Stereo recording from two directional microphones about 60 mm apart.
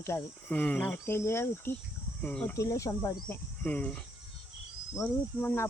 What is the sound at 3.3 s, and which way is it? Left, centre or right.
Speech, left.